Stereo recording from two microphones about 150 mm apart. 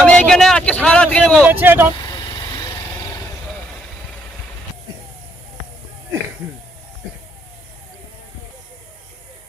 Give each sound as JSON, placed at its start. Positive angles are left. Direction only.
{"t": 0.0, "sound": "speech", "side_deg": 5}
{"t": 1.5, "sound": "speech", "side_deg": -15}
{"t": 2.0, "sound": "vehicle", "side_deg": 25}